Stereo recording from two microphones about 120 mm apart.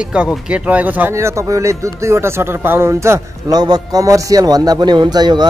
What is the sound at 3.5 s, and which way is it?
A man's voice, 35° right (ahead or behind).